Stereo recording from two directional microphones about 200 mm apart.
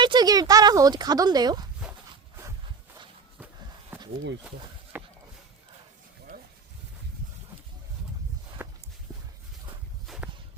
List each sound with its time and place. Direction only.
0.0 s speech: 20° right (ahead or behind)
4.4 s a sound: 5° right (ahead or behind)
8.6 s walk: 10° right (ahead or behind)
10.1 s walk: centre (ahead or behind)